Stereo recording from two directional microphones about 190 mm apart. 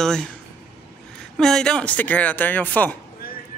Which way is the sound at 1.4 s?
5° left (ahead or behind).